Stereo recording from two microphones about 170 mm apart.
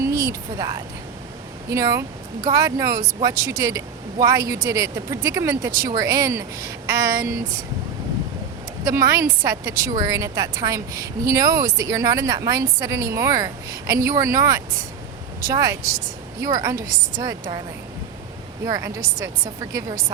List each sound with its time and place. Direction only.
0.0 s a sound: 20° right (ahead or behind)
1.7 s a woman's voice: 20° right (ahead or behind)
9.0 s a woman's voice: 20° right (ahead or behind)
18.6 s a woman's voice: 20° right (ahead or behind)